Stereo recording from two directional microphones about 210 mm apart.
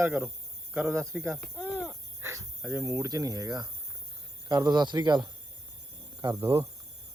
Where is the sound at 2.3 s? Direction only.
10° right (ahead or behind).